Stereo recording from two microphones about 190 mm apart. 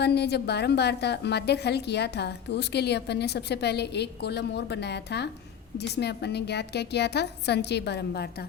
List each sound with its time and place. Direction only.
0.0 s a woman's voice: 60° left (ahead or behind)